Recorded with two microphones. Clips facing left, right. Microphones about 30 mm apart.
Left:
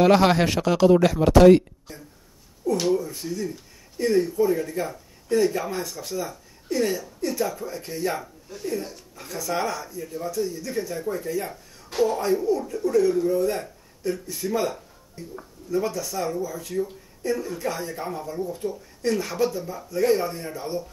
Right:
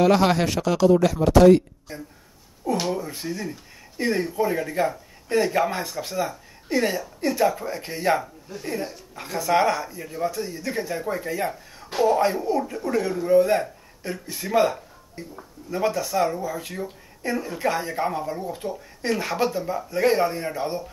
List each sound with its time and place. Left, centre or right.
0.0 s speech: centre
0.8 s speech: left
1.9 s speech: right
8.2 s speech: centre
8.6 s speech: right